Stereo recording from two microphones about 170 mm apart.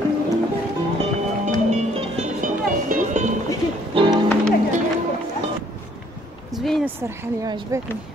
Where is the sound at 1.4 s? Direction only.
45° right (ahead or behind).